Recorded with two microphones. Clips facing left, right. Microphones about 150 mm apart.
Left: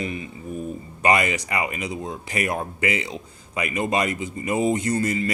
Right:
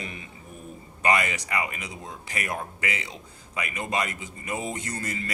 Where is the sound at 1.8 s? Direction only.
35° left (ahead or behind).